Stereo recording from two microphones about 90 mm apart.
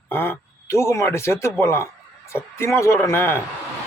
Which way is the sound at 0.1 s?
25° left (ahead or behind).